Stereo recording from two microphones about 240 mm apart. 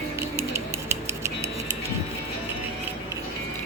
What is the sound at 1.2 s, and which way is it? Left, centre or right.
Music, centre.